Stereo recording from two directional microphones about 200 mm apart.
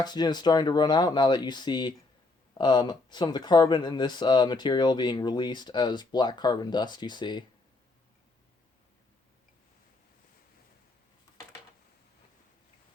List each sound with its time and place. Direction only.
0.0 s speech: 20° left (ahead or behind)